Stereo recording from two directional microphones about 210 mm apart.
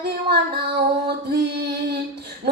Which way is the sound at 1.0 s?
50° right (ahead or behind).